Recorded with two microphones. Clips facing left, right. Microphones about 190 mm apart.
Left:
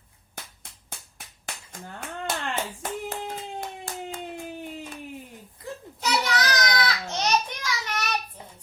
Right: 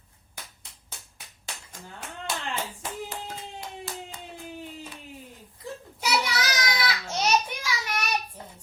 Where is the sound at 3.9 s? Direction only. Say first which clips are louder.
Left 2 dB; 50° left (ahead or behind).